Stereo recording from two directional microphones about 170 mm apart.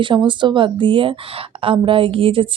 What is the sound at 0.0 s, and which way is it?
Speech, 30° right (ahead or behind).